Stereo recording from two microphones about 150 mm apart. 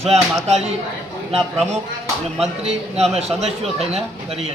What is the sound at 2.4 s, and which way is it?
A man's voice, 45° right (ahead or behind).